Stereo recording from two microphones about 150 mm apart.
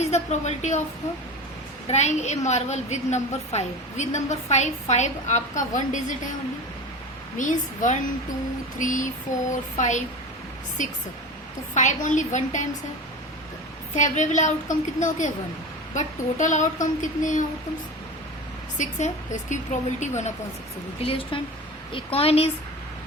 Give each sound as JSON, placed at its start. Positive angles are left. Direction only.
{"t": 0.0, "sound": "a woman's voice", "side_deg": 50}
{"t": 1.9, "sound": "a woman's voice", "side_deg": 50}
{"t": 7.3, "sound": "speech", "side_deg": 55}
{"t": 13.9, "sound": "speech", "side_deg": 55}
{"t": 18.8, "sound": "a woman's voice", "side_deg": 55}
{"t": 21.0, "sound": "a woman's voice", "side_deg": 40}